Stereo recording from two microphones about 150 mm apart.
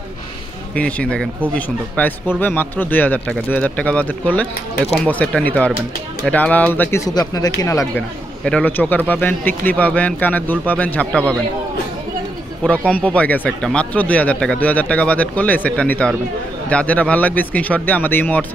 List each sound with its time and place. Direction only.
0.7 s speech: 10° left (ahead or behind)
7.1 s speech: 25° left (ahead or behind)
8.5 s speech: 10° left (ahead or behind)
12.6 s speech: 10° left (ahead or behind)